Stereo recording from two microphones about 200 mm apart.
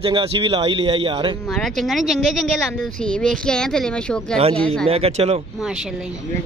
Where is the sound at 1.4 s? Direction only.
Centre (ahead or behind).